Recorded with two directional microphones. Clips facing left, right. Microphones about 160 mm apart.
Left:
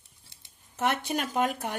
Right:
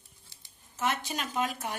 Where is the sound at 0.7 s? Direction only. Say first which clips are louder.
Left 4 dB; 60° left (ahead or behind).